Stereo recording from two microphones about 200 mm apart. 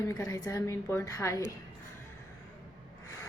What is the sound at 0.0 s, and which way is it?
A woman's voice, 15° left (ahead or behind).